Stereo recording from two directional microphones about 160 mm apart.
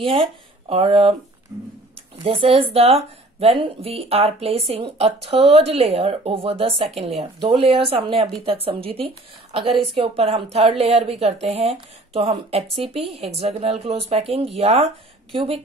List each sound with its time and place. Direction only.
0.7 s speech: 35° right (ahead or behind)
1.5 s speech: 15° right (ahead or behind)
2.2 s speech: 35° right (ahead or behind)